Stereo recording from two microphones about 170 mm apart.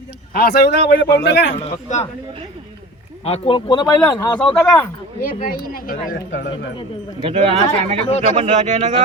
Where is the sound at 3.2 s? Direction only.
35° left (ahead or behind).